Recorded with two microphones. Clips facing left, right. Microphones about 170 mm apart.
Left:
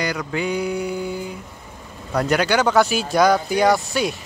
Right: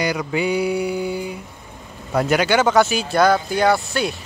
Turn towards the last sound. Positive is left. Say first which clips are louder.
# even
turn(degrees=0)  # may be behind; listen again after turning